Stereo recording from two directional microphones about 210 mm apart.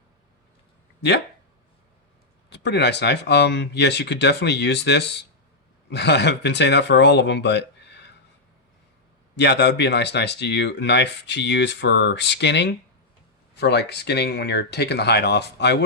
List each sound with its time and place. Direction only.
2.5 s speech: 55° left (ahead or behind)
9.3 s speech: 55° left (ahead or behind)